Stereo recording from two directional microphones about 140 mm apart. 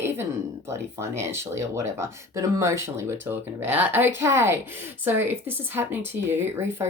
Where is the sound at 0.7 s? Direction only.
20° right (ahead or behind).